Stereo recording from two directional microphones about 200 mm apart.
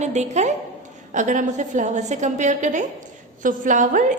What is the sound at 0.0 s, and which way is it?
A woman's voice, 35° right (ahead or behind).